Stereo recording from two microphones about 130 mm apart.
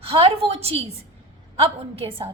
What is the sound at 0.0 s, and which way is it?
A woman's voice, 45° right (ahead or behind).